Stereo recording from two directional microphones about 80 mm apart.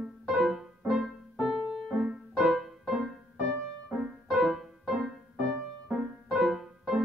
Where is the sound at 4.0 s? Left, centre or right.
Centre.